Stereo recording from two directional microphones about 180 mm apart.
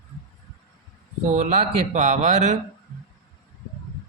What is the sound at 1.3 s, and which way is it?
Speech, 40° right (ahead or behind).